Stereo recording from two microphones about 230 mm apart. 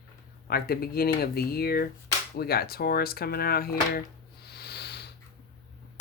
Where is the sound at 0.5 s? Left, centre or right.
Left.